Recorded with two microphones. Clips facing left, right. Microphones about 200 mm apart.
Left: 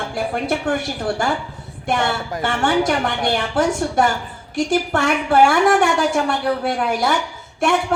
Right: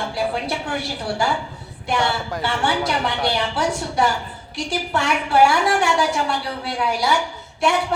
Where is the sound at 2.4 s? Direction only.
50° left (ahead or behind).